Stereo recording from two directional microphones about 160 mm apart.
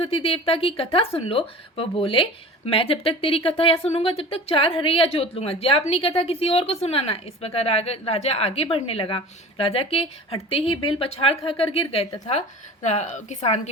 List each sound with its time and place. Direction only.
0.0 s a woman's voice: 35° left (ahead or behind)